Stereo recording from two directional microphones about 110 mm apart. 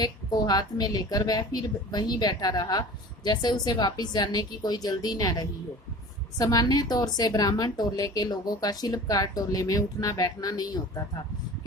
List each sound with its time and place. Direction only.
0.0 s a woman's voice: 40° left (ahead or behind)